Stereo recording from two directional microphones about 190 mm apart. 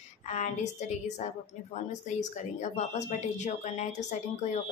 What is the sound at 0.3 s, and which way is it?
A woman's voice, 40° left (ahead or behind).